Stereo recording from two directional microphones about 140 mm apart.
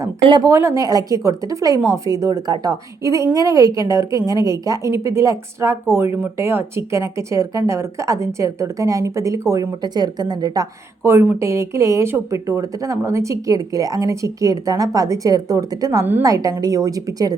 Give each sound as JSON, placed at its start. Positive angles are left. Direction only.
{"t": 0.4, "sound": "speech", "side_deg": -20}